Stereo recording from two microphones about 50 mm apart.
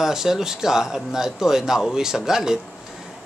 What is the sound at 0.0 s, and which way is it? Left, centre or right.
Speech, centre.